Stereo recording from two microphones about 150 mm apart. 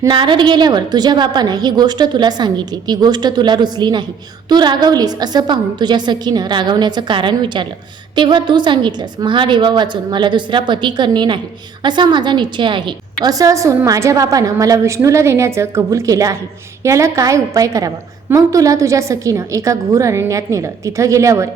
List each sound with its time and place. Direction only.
0.1 s a woman's voice: 30° right (ahead or behind)
13.2 s a woman's voice: 20° right (ahead or behind)